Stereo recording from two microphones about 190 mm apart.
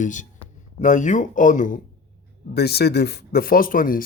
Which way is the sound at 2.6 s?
60° left (ahead or behind).